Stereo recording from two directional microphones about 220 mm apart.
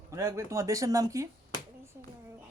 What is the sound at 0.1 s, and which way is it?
Speech, 10° right (ahead or behind).